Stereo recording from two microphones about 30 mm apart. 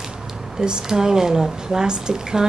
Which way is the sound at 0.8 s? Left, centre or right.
Centre.